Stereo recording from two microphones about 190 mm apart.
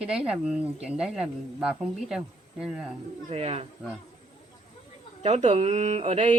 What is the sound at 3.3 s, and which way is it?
Speech, 30° right (ahead or behind).